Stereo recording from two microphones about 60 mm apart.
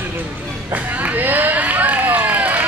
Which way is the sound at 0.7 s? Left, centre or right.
Right.